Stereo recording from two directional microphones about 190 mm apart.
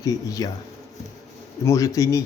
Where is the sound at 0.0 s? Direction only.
20° left (ahead or behind).